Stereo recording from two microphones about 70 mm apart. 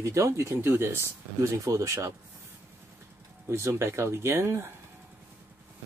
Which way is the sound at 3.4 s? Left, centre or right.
Right.